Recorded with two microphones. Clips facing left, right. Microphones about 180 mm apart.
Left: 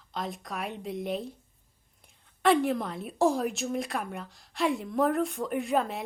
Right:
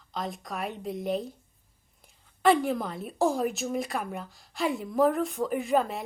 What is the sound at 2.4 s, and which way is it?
Speech, centre (ahead or behind).